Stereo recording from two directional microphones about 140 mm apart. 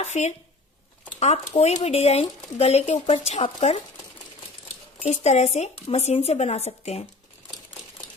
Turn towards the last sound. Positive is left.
turn(degrees=50)  # may be behind; listen again after turning